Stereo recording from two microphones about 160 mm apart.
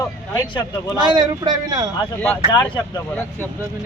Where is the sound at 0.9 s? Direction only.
30° right (ahead or behind).